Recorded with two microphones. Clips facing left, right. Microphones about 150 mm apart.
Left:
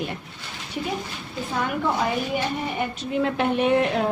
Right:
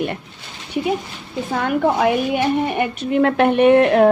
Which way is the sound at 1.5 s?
60° right (ahead or behind).